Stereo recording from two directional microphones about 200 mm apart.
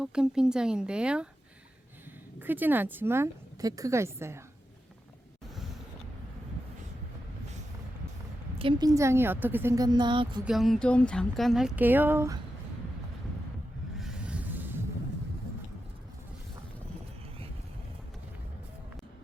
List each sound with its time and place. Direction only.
0.0 s speech: 5° right (ahead or behind)
2.4 s speech: 10° right (ahead or behind)
8.5 s speech: 25° right (ahead or behind)
10.4 s speech: centre (ahead or behind)
13.9 s a sound: 5° right (ahead or behind)